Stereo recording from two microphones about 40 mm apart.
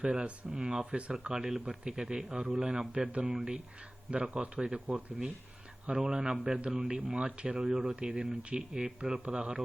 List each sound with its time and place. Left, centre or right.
0.0 s speech: right
1.3 s speech: centre